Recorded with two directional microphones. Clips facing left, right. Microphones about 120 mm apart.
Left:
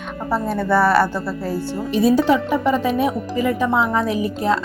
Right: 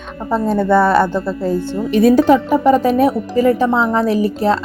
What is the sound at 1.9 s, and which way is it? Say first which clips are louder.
Speech: right 5 dB; 55° right (ahead or behind).